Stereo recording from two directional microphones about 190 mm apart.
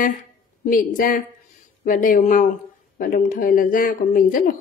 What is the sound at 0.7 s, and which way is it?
A woman's voice, 45° left (ahead or behind).